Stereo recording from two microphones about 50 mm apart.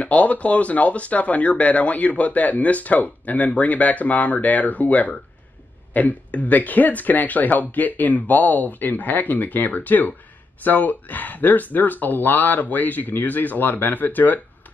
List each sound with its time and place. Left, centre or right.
0.0 s speech: left